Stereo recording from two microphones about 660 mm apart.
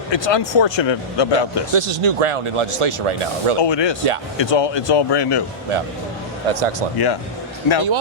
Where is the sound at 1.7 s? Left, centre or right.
Right.